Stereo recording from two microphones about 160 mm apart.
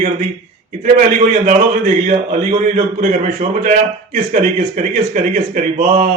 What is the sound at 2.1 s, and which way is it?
A man's voice, 50° right (ahead or behind).